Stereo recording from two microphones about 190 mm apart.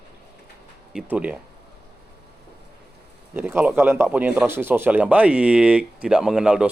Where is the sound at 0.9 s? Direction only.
5° right (ahead or behind).